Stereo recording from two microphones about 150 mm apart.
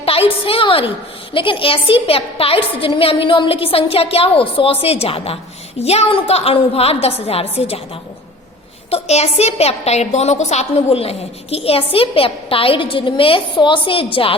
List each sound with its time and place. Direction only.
0.0 s a sound: 40° left (ahead or behind)
1.3 s a woman's voice: 35° left (ahead or behind)
8.9 s a woman's voice: 45° left (ahead or behind)